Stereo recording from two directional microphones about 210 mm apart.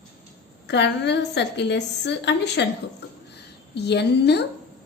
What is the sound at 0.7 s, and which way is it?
A woman's voice, 55° left (ahead or behind).